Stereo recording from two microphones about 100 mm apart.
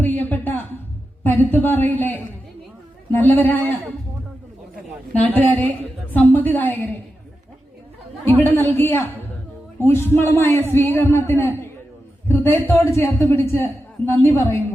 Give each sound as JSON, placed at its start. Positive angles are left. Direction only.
{"t": 0.0, "sound": "a sound", "side_deg": 15}
{"t": 1.2, "sound": "a man's voice", "side_deg": 20}
{"t": 5.2, "sound": "a woman's voice", "side_deg": 15}
{"t": 8.4, "sound": "a man's voice", "side_deg": 20}